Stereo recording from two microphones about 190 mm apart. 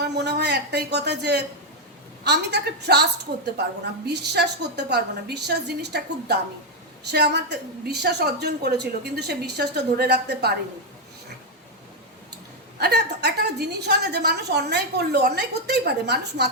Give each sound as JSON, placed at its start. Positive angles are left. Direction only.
{"t": 0.0, "sound": "a woman's voice", "side_deg": -60}
{"t": 12.8, "sound": "a woman's voice", "side_deg": -60}